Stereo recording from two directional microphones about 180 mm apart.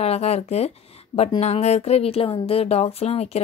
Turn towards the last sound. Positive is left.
turn(degrees=35)  # may be behind; listen again after turning